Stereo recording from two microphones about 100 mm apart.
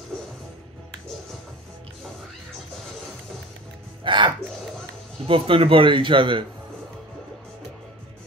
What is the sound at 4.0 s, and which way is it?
Speech, 55° right (ahead or behind).